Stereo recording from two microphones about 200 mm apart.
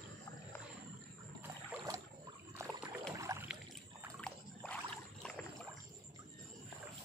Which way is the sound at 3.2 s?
15° right (ahead or behind).